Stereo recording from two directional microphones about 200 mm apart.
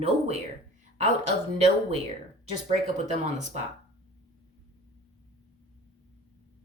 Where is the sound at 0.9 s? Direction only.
35° right (ahead or behind).